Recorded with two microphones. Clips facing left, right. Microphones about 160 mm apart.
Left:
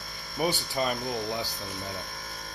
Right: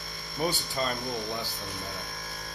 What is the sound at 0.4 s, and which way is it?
Speech, 15° left (ahead or behind).